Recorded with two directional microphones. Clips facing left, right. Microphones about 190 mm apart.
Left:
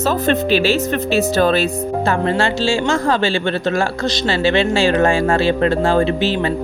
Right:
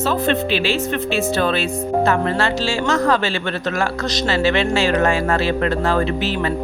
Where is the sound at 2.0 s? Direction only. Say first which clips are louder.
Left 2 dB; 25° left (ahead or behind).